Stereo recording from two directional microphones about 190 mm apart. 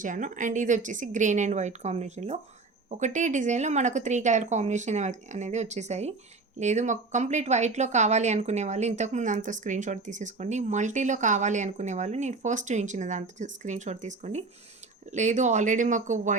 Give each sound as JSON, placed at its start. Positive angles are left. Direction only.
{"t": 0.0, "sound": "a woman's voice", "side_deg": -40}